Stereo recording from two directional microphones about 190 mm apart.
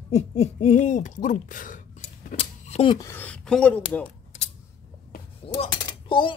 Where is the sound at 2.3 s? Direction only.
30° left (ahead or behind).